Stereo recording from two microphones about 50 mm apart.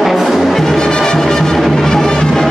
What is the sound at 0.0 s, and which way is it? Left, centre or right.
Music, centre.